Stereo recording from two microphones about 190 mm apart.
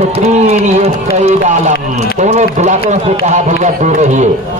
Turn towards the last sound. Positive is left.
turn(degrees=-40)  # may be behind; listen again after turning